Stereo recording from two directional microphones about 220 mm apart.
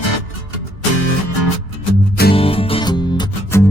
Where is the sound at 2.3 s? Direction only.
25° left (ahead or behind).